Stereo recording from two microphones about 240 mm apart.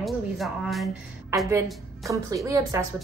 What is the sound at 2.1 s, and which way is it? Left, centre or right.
Speech, centre.